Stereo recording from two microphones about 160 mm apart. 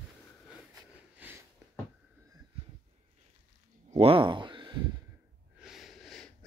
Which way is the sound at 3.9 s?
35° right (ahead or behind).